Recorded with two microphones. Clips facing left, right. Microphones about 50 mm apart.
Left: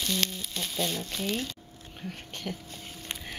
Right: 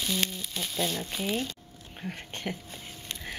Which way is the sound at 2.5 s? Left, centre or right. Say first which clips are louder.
Right 2 dB; right.